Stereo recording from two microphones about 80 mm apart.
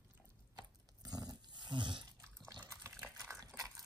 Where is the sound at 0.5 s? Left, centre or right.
Right.